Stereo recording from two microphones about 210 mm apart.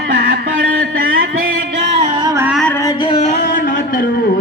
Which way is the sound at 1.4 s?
55° right (ahead or behind).